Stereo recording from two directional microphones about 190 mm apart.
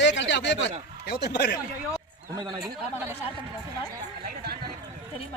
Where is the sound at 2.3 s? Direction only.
20° right (ahead or behind).